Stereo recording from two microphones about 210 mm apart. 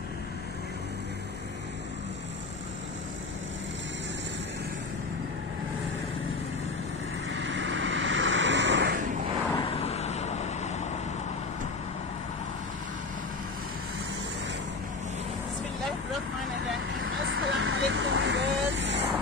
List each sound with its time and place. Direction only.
7.2 s vehicle: 60° right (ahead or behind)
9.6 s vehicle: 30° left (ahead or behind)
17.0 s vehicle: 70° right (ahead or behind)